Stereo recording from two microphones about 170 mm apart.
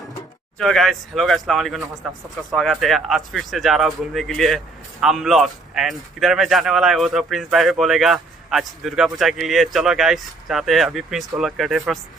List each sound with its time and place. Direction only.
0.6 s speech: centre (ahead or behind)